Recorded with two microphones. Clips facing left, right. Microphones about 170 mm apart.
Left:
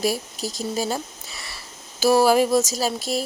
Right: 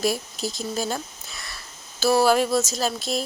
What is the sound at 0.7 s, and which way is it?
A woman's voice, 10° left (ahead or behind).